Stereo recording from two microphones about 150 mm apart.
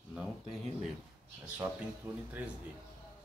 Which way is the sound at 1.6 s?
15° right (ahead or behind).